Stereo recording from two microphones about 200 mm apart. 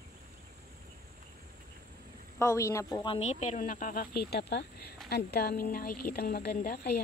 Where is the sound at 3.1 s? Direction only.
35° left (ahead or behind).